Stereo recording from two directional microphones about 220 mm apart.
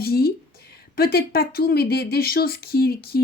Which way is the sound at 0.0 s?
45° left (ahead or behind).